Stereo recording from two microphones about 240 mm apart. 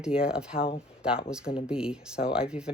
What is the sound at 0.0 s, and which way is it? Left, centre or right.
Speech, centre.